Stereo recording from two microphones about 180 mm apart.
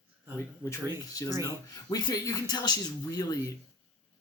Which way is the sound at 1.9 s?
20° left (ahead or behind).